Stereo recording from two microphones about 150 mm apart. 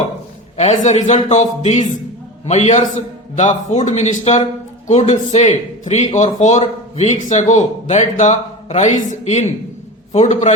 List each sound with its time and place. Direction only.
0.5 s a man's voice: 50° left (ahead or behind)